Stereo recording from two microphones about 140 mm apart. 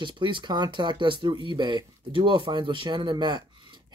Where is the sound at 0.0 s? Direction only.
35° right (ahead or behind).